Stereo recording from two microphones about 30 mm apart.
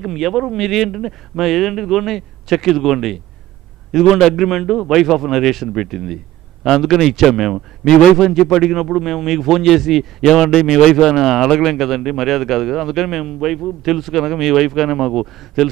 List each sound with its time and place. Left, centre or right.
0.0 s a man's voice: centre
10.6 s a man's voice: right
11.1 s a man's voice: centre